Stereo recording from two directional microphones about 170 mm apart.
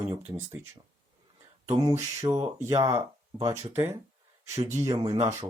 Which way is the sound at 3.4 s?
20° right (ahead or behind).